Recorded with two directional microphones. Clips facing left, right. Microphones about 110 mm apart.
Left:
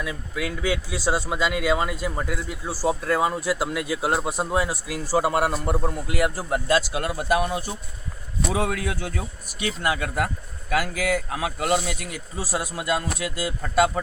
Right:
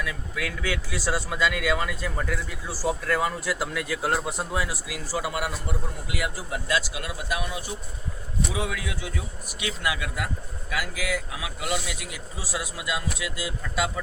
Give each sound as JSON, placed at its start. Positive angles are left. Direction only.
{"t": 0.0, "sound": "a man's voice", "side_deg": 25}